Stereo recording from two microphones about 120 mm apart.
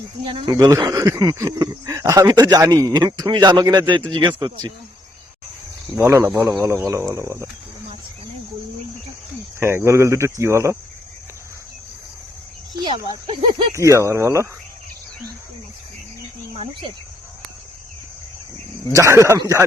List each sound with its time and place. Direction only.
0.3 s speech: 45° right (ahead or behind)
0.6 s speech: 30° right (ahead or behind)
6.0 s speech: 20° right (ahead or behind)
6.4 s speech: 5° right (ahead or behind)
6.7 s speech: 25° right (ahead or behind)
9.6 s speech: 20° right (ahead or behind)
13.2 s speech: 45° right (ahead or behind)
13.7 s speech: 25° right (ahead or behind)
18.9 s speech: 25° right (ahead or behind)